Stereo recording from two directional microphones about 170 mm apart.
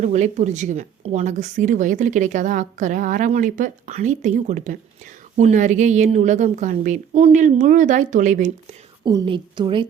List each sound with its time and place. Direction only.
0.0 s speech: 45° right (ahead or behind)
9.0 s a woman's voice: 25° right (ahead or behind)